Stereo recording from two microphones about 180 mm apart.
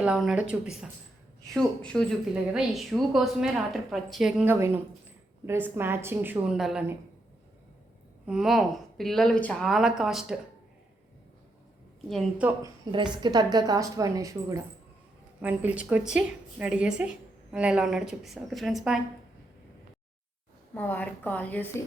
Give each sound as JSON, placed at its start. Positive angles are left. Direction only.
{"t": 0.0, "sound": "a woman's voice", "side_deg": -5}
{"t": 8.3, "sound": "a woman's voice", "side_deg": 0}
{"t": 12.0, "sound": "a woman's voice", "side_deg": 0}
{"t": 12.9, "sound": "a woman's voice", "side_deg": -25}
{"t": 20.7, "sound": "a woman's voice", "side_deg": 10}